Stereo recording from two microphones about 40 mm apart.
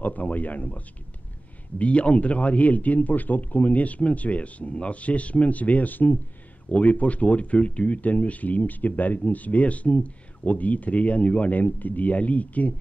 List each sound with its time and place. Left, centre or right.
0.0 s speech: left
6.7 s speech: left